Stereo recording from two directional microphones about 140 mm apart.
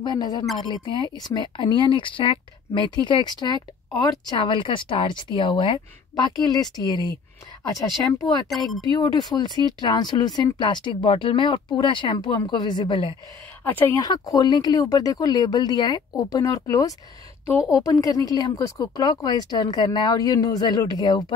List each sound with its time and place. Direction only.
0.0 s speech: 30° left (ahead or behind)
8.5 s speech: centre (ahead or behind)
8.9 s speech: 30° left (ahead or behind)
13.7 s speech: 15° left (ahead or behind)
14.0 s speech: 25° left (ahead or behind)